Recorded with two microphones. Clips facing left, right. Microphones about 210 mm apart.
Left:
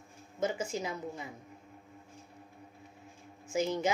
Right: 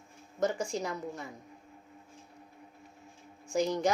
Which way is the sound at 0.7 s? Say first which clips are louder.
Right 1 dB; 5° left (ahead or behind).